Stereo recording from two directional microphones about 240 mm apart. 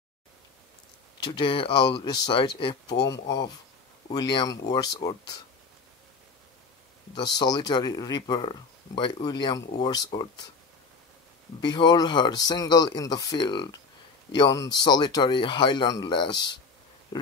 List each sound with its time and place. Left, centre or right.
1.2 s speech: left
7.2 s speech: centre
11.6 s speech: centre